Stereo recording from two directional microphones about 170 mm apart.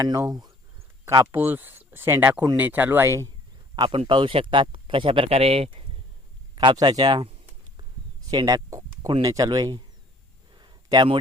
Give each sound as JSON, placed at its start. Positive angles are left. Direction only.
{"t": 0.0, "sound": "speech", "side_deg": -20}
{"t": 3.8, "sound": "speech", "side_deg": -30}
{"t": 8.3, "sound": "speech", "side_deg": -20}
{"t": 10.5, "sound": "a sound", "side_deg": -25}